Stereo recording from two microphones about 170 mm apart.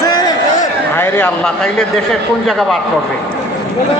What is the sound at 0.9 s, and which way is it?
Speech, 10° left (ahead or behind).